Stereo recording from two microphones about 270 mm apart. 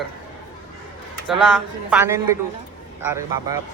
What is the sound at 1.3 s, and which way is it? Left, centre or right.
Speech, centre.